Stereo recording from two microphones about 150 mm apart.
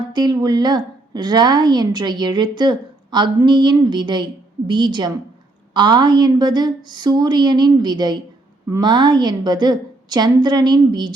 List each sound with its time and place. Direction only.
0.1 s a woman's voice: 25° right (ahead or behind)